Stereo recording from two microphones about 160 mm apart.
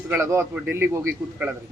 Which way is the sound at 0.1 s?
15° right (ahead or behind).